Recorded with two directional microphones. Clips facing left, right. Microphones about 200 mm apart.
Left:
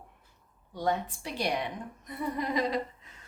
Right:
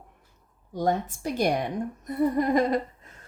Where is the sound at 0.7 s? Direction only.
45° right (ahead or behind).